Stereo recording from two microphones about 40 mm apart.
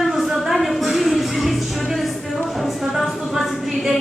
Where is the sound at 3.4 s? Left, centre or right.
Centre.